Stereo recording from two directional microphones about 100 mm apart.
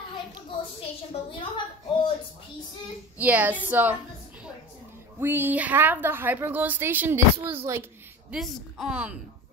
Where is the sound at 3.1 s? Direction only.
15° right (ahead or behind).